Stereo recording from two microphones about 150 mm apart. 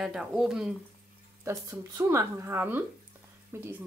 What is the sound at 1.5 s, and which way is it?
Speech, 20° right (ahead or behind).